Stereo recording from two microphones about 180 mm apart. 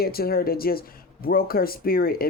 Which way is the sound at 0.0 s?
55° left (ahead or behind).